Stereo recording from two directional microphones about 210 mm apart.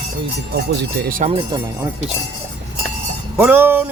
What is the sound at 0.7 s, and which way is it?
Speech, 50° right (ahead or behind).